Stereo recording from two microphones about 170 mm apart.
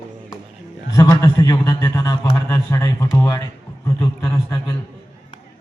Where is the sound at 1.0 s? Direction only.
20° left (ahead or behind).